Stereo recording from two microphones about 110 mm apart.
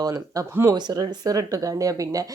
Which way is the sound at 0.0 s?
30° right (ahead or behind).